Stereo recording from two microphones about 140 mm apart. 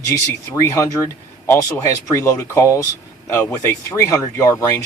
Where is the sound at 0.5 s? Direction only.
20° left (ahead or behind).